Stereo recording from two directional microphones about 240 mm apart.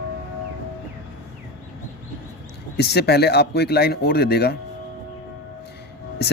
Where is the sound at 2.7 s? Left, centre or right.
Left.